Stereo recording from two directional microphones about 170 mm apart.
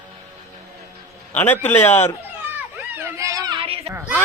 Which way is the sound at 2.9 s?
15° right (ahead or behind).